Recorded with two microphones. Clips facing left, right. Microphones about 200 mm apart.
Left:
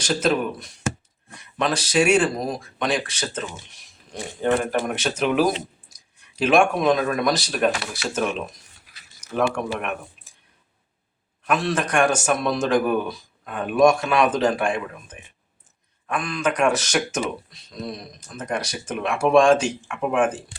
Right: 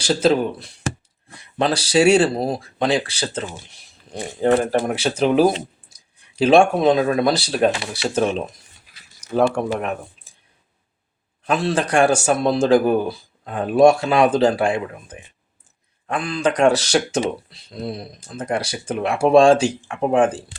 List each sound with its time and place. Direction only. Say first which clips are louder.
0.0 s speech: right 4 dB; 30° right (ahead or behind)
11.4 s speech: right 3 dB; 30° right (ahead or behind)